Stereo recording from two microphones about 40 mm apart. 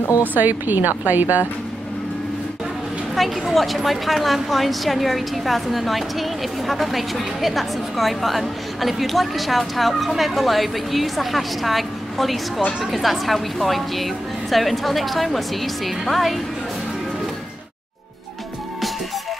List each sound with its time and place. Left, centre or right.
0.2 s speech: right
3.2 s a woman's voice: centre